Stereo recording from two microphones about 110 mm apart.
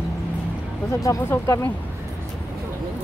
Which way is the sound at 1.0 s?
30° left (ahead or behind).